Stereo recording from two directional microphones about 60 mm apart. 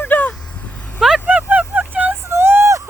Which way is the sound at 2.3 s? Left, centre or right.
Right.